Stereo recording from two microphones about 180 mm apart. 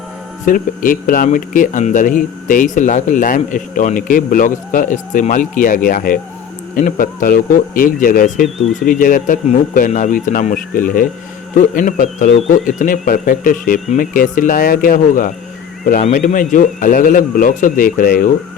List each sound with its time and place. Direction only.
0.4 s speech: 50° left (ahead or behind)